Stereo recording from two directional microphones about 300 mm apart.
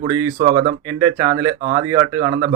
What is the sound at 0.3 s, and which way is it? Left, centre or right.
Speech, right.